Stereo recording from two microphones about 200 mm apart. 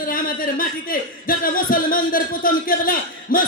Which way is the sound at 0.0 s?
45° left (ahead or behind).